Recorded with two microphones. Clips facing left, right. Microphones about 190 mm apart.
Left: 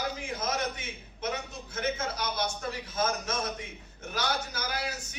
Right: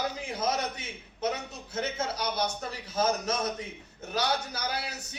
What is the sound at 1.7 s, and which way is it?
A man's voice, 35° right (ahead or behind).